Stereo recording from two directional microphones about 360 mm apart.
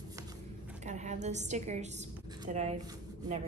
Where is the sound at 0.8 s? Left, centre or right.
Centre.